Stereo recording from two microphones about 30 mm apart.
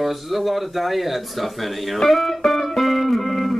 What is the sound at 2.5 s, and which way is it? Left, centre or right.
Music, centre.